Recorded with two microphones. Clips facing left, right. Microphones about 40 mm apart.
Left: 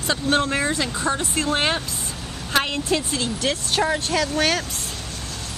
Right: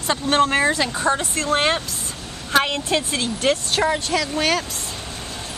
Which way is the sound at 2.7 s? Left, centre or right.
Right.